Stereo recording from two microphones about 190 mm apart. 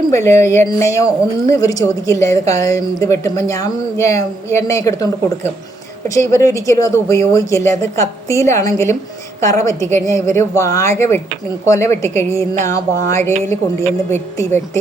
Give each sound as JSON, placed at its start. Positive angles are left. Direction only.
{"t": 0.1, "sound": "a woman's voice", "side_deg": 15}